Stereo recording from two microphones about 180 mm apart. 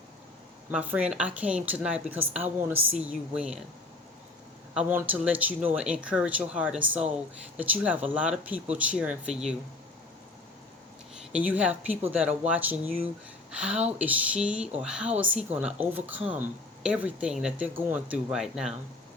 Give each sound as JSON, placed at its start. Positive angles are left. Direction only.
{"t": 0.7, "sound": "speech", "side_deg": -5}
{"t": 4.7, "sound": "speech", "side_deg": -10}
{"t": 11.3, "sound": "speech", "side_deg": -5}